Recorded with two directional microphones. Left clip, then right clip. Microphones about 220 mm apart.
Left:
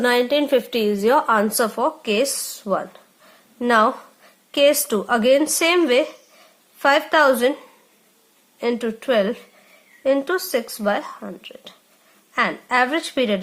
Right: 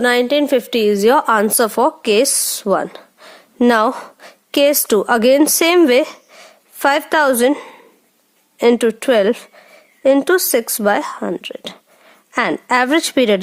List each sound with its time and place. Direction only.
0.0 s a woman's voice: 40° right (ahead or behind)